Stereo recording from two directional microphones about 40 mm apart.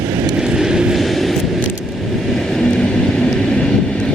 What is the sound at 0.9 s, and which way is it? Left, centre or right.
Vehicle, centre.